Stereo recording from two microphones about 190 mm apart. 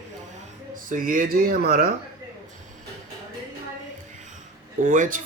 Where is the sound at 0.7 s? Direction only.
45° right (ahead or behind).